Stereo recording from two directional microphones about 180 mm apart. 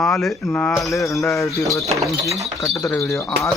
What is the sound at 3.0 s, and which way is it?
Speech, centre (ahead or behind).